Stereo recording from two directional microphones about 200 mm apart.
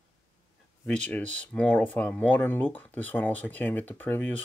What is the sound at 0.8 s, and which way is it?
Speech, 5° left (ahead or behind).